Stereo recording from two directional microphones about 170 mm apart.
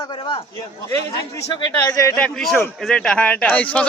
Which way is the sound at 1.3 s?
15° left (ahead or behind).